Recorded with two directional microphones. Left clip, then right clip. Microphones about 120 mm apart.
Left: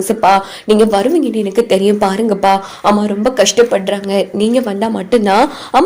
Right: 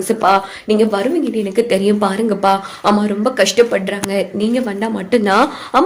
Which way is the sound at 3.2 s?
35° left (ahead or behind).